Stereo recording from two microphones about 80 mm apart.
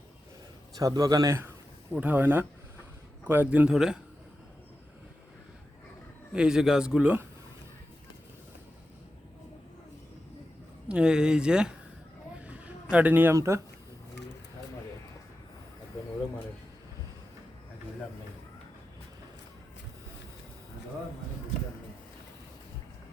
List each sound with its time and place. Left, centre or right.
0.8 s speech: right
1.4 s speech: right
3.7 s speech: centre
6.3 s speech: centre
10.8 s speech: centre
12.5 s a sound: centre
13.3 s speech: right